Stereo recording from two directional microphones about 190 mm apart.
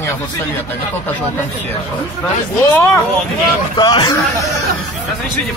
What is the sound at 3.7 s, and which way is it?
Speech, 25° left (ahead or behind).